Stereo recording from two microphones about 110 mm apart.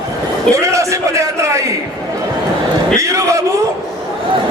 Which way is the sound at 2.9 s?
30° right (ahead or behind).